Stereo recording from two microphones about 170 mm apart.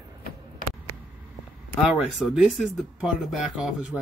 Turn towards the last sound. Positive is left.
turn(degrees=0)  # may be behind; listen again after turning